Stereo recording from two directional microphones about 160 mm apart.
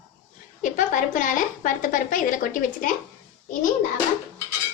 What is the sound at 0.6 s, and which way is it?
A woman's voice, 55° left (ahead or behind).